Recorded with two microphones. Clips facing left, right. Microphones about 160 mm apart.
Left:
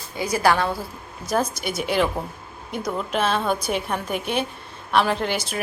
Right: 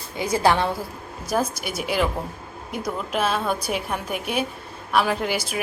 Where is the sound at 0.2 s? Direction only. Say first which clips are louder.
Even; 20° right (ahead or behind).